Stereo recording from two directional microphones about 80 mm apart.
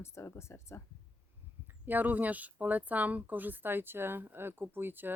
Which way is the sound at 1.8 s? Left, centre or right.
Right.